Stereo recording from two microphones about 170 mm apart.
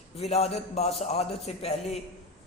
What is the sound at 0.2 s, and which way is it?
A man's voice, 40° left (ahead or behind).